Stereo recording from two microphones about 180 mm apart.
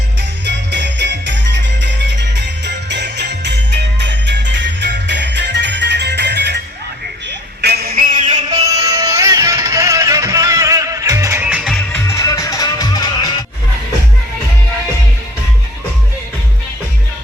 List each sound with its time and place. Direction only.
0.2 s music: 75° right (ahead or behind)
7.6 s music: 60° right (ahead or behind); by 8.4 s 45° right (ahead or behind)
8.6 s music: 20° right (ahead or behind)
11.9 s music: 15° left (ahead or behind)